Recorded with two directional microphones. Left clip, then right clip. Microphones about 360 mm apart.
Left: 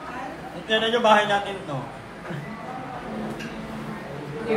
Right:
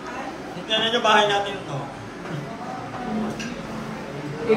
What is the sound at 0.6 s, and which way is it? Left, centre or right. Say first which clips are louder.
Speech: left 1 dB; centre.